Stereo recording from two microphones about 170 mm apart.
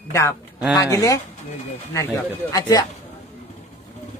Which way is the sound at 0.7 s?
15° left (ahead or behind).